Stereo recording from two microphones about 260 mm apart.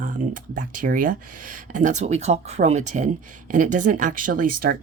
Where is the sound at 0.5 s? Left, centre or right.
Right.